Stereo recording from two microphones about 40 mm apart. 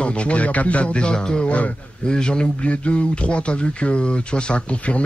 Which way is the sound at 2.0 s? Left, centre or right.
Left.